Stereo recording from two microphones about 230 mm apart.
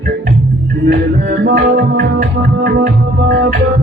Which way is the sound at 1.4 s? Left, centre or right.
Right.